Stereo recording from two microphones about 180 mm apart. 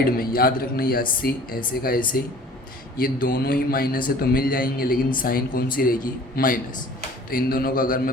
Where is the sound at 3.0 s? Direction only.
55° left (ahead or behind).